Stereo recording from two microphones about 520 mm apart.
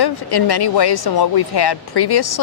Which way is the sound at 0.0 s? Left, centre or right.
Left.